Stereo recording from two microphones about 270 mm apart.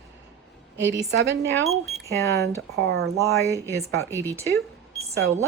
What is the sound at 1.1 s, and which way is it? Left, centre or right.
Speech, right.